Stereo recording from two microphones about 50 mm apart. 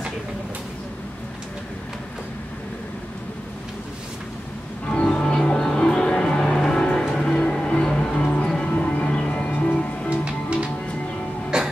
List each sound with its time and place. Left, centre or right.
4.8 s music: centre
10.2 s music: right